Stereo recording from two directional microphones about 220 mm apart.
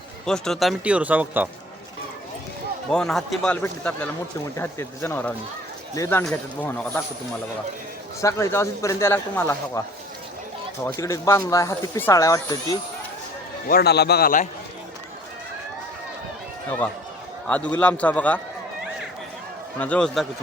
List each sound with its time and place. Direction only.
0.3 s a man's voice: centre (ahead or behind)
2.9 s a man's voice: 5° left (ahead or behind)
8.2 s speech: 15° left (ahead or behind)
10.8 s speech: 15° left (ahead or behind)
13.7 s a man's voice: 45° left (ahead or behind)
17.4 s speech: 5° left (ahead or behind)
19.8 s a man's voice: 5° left (ahead or behind)